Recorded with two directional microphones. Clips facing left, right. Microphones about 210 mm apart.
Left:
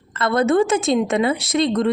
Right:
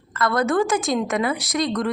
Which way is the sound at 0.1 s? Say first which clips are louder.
Left 3 dB; 25° left (ahead or behind).